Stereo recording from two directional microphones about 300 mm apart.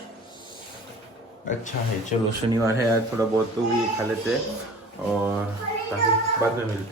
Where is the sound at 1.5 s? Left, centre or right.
Left.